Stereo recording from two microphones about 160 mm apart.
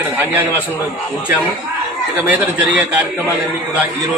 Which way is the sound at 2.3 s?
10° right (ahead or behind).